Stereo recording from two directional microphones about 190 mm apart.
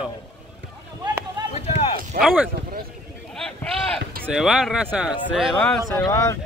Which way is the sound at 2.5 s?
55° right (ahead or behind).